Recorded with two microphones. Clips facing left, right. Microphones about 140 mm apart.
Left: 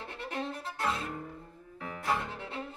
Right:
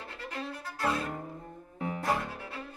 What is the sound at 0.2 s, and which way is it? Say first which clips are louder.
Music: left 2 dB; 25° left (ahead or behind).